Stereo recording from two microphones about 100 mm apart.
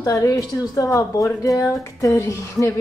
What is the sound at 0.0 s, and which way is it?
A woman's voice, 35° left (ahead or behind).